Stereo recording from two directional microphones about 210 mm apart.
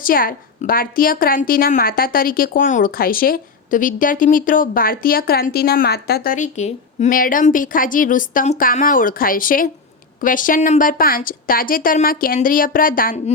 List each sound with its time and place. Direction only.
0.0 s a woman's voice: 45° left (ahead or behind)